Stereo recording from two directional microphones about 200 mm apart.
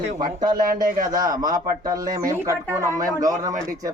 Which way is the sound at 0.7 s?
45° right (ahead or behind).